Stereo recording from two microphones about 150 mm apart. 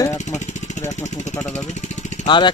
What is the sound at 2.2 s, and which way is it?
Speech, 30° left (ahead or behind).